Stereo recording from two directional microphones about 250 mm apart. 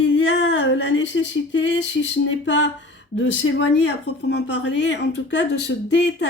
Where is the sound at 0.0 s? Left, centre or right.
Left.